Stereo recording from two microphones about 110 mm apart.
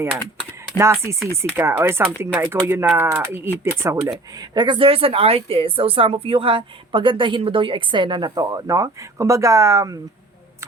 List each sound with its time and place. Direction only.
0.8 s speech: 25° right (ahead or behind)
4.4 s speech: 40° right (ahead or behind)